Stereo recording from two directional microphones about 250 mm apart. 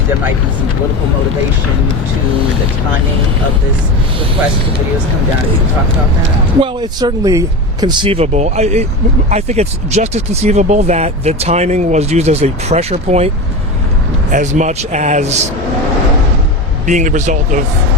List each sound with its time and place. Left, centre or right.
6.6 s speech: centre
16.8 s speech: right